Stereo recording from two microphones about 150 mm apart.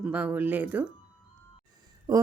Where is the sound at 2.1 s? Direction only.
25° right (ahead or behind).